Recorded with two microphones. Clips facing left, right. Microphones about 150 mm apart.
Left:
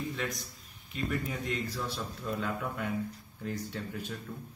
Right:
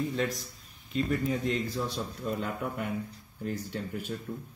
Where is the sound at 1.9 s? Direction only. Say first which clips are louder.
Right 3 dB; 20° right (ahead or behind).